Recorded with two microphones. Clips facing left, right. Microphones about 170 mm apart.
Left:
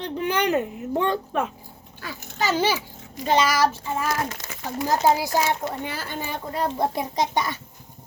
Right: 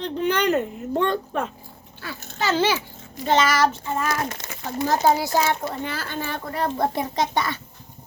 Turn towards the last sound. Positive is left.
turn(degrees=15)  # may be behind; listen again after turning